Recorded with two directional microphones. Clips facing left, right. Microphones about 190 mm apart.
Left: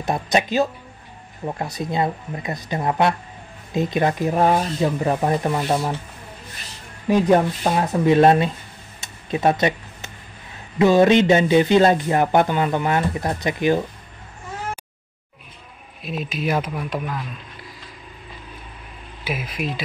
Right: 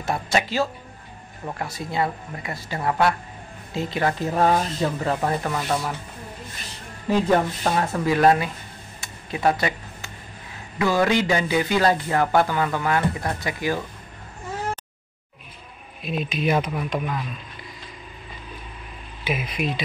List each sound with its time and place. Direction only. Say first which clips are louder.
0.0 s speech: left 3 dB; 20° left (ahead or behind)
7.1 s speech: left 4 dB; 15° left (ahead or behind)
9.0 s a sound: left 3 dB; 25° left (ahead or behind)
10.8 s speech: left 6 dB; 20° left (ahead or behind)
16.0 s speech: right 1 dB; centre (ahead or behind)
19.2 s speech: right 1 dB; 5° left (ahead or behind)